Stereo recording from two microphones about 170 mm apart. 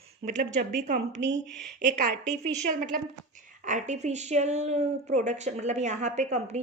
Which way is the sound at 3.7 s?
45° right (ahead or behind).